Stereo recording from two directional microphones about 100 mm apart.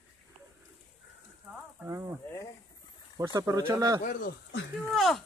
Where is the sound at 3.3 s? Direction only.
40° right (ahead or behind).